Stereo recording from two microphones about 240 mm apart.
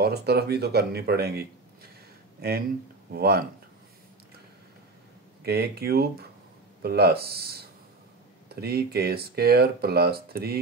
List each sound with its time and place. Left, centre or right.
0.0 s speech: right
5.4 s speech: right